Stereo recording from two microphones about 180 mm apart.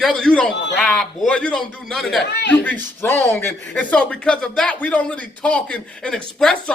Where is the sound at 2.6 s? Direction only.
10° left (ahead or behind).